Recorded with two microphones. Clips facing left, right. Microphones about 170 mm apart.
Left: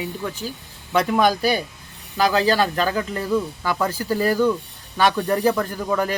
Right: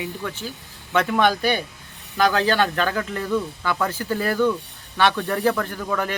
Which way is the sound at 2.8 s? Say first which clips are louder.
Left 1 dB; 15° left (ahead or behind).